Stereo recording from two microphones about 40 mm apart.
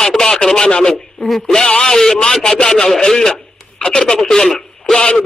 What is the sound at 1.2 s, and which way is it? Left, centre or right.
Speech, centre.